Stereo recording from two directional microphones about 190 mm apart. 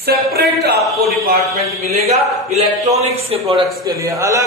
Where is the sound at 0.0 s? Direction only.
55° right (ahead or behind).